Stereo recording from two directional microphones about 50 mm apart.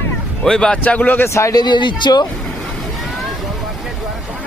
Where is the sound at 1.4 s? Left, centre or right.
Left.